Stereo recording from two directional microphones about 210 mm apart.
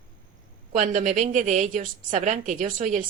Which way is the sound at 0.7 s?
35° right (ahead or behind).